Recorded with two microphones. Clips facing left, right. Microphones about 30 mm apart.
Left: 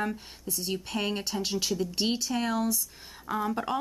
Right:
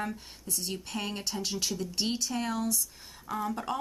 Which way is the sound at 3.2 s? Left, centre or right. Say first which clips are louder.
Left 3 dB; left.